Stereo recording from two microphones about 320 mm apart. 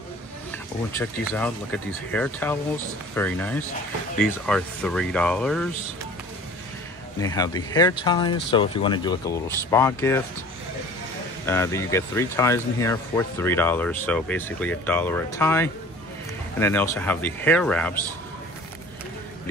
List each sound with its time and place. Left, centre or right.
0.9 s speech: centre
7.2 s speech: centre
11.4 s speech: centre